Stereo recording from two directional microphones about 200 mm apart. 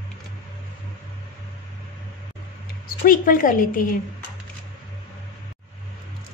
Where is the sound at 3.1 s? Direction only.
45° left (ahead or behind).